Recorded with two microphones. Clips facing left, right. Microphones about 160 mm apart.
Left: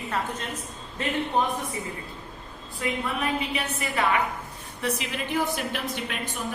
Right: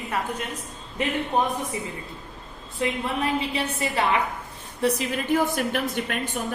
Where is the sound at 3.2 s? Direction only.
30° right (ahead or behind).